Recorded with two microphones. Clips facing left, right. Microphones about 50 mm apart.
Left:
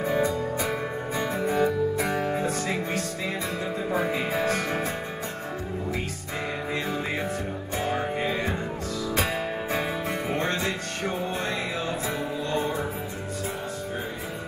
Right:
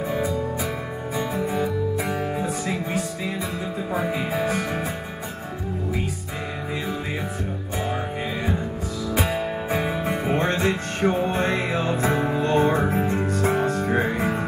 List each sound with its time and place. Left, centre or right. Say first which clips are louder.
0.0 s music: even; centre
3.9 s music: right 1 dB; centre
9.1 s music: right 4 dB; centre
10.2 s music: right 6 dB; right
11.1 s music: right 6 dB; right